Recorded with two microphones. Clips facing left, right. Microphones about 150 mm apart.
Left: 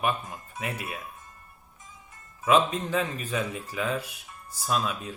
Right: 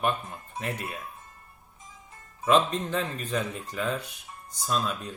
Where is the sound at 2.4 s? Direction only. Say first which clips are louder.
Even; 5° left (ahead or behind).